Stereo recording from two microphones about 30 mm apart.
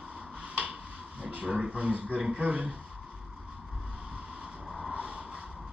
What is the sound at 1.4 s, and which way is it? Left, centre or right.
Mantra, right.